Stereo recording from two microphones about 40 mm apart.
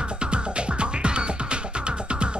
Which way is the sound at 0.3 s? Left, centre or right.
Right.